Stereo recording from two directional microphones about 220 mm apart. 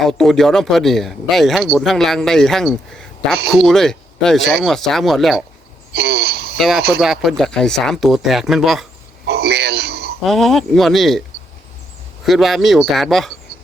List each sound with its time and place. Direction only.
0.0 s a man's voice: centre (ahead or behind)
5.9 s a sound: 45° right (ahead or behind)
6.6 s a man's voice: centre (ahead or behind)
9.2 s a sound: 45° right (ahead or behind)
10.2 s a man's voice: centre (ahead or behind)
12.2 s a man's voice: centre (ahead or behind)